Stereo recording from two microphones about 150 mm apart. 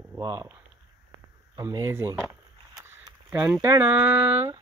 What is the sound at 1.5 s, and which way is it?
Speech, 25° right (ahead or behind).